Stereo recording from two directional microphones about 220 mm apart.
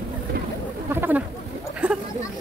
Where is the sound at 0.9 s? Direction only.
10° right (ahead or behind).